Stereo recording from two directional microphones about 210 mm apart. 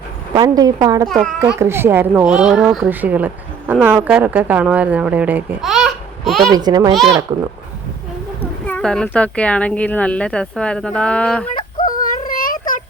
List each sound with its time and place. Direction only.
0.3 s a woman's voice: 20° right (ahead or behind); by 6.4 s centre (ahead or behind)
6.5 s a child's voice: 20° right (ahead or behind)
8.6 s speech: 5° left (ahead or behind)
11.5 s yodeling: 25° left (ahead or behind)
12.0 s child singing: 40° left (ahead or behind)